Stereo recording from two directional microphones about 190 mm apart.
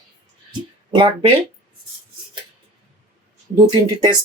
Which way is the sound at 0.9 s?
25° right (ahead or behind).